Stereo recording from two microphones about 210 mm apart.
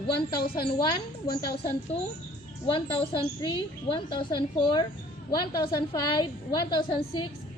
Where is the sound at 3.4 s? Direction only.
20° left (ahead or behind).